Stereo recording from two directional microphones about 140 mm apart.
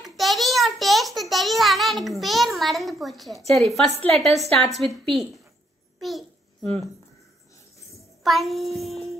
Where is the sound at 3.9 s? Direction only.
45° right (ahead or behind).